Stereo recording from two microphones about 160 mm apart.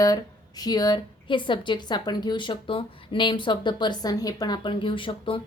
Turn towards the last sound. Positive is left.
turn(degrees=30)  # may be behind; listen again after turning